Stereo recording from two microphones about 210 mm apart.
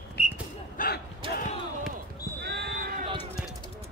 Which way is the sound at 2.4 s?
50° right (ahead or behind).